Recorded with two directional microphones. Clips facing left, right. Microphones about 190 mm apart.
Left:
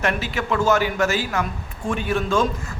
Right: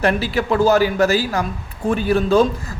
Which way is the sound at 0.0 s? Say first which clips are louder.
Right 6 dB; 35° right (ahead or behind).